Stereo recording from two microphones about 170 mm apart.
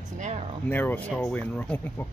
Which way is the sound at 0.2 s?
45° right (ahead or behind).